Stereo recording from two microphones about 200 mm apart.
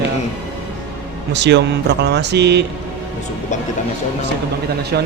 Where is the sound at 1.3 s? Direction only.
60° right (ahead or behind).